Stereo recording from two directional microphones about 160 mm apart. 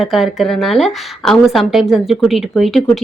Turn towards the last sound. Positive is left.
turn(degrees=0)  # may be behind; listen again after turning